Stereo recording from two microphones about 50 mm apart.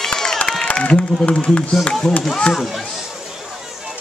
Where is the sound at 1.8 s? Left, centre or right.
Centre.